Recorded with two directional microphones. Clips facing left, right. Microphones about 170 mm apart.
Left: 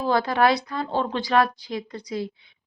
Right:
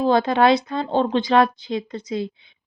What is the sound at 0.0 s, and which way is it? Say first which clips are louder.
A woman's voice: right 4 dB; 20° right (ahead or behind).